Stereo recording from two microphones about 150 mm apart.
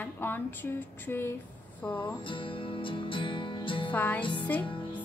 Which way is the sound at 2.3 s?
35° left (ahead or behind).